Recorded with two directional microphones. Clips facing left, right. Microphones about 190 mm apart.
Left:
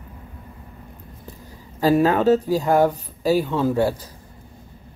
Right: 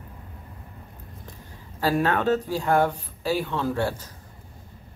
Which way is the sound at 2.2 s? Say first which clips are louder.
Left 6 dB; 40° left (ahead or behind).